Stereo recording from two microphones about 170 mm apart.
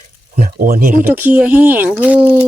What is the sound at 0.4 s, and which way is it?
Speech, 60° right (ahead or behind).